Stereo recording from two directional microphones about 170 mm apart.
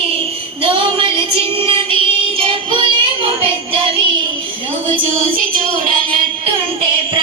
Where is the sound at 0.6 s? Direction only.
35° right (ahead or behind).